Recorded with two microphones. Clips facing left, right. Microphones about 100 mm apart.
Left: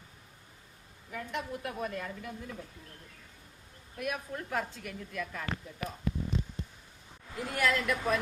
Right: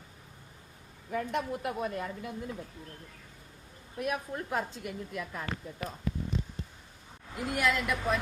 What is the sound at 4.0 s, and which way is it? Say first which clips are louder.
A woman's voice: right 3 dB; 25° right (ahead or behind).